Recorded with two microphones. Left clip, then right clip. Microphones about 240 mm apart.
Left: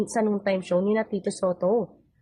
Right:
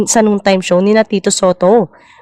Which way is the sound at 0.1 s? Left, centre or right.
Right.